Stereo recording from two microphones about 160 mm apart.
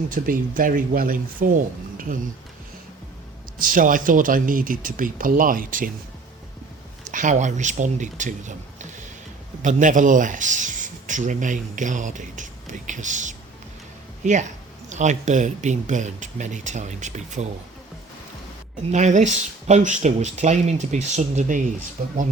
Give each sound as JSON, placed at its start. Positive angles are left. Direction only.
{"t": 0.1, "sound": "speech", "side_deg": -60}
{"t": 3.6, "sound": "speech", "side_deg": -60}
{"t": 7.0, "sound": "speech", "side_deg": -55}
{"t": 18.9, "sound": "speech", "side_deg": -50}